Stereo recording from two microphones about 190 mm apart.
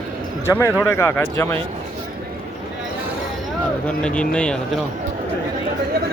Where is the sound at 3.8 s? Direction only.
5° left (ahead or behind).